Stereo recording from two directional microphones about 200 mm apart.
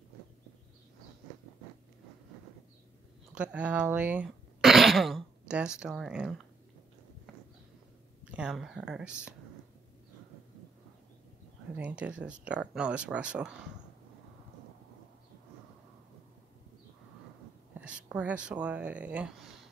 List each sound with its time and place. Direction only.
3.3 s speech: 5° right (ahead or behind)
8.3 s speech: 5° right (ahead or behind)
11.7 s speech: 5° right (ahead or behind)
17.7 s speech: 5° right (ahead or behind)